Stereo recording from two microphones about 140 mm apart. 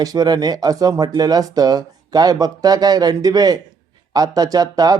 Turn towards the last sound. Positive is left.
turn(degrees=-25)  # may be behind; listen again after turning